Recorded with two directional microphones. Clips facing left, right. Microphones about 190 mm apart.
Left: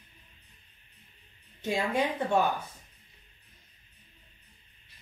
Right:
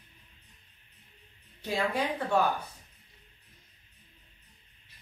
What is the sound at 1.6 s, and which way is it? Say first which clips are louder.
Speech: left 2 dB; 25° left (ahead or behind).